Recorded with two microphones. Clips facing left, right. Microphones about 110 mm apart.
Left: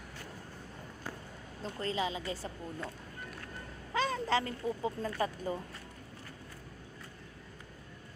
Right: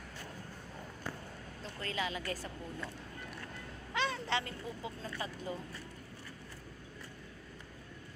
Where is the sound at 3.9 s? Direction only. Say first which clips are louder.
Left 4 dB; 40° left (ahead or behind).